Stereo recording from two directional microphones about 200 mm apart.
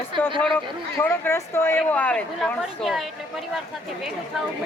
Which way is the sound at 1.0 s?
10° left (ahead or behind).